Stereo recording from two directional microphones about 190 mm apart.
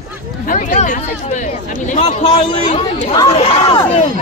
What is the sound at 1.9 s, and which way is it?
Speech, 30° left (ahead or behind).